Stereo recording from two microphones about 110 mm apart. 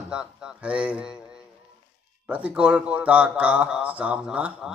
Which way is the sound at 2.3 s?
10° right (ahead or behind).